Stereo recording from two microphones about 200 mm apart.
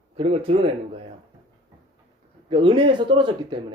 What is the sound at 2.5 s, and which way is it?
Speech, 25° right (ahead or behind).